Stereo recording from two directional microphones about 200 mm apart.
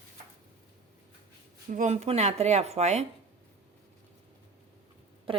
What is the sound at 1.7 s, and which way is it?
Speech, 35° right (ahead or behind).